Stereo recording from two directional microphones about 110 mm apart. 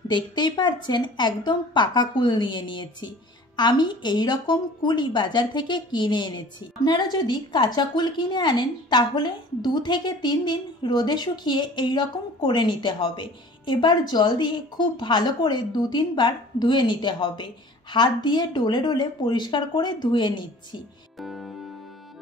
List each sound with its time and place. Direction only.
0.1 s a woman's voice: 45° left (ahead or behind)
21.2 s music: centre (ahead or behind)